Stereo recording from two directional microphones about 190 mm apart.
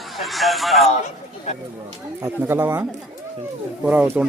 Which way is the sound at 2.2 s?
10° right (ahead or behind).